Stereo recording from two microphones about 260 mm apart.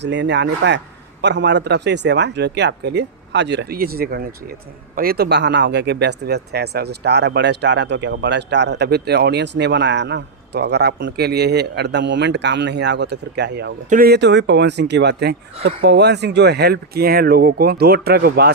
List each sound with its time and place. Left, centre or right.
0.0 s speech: right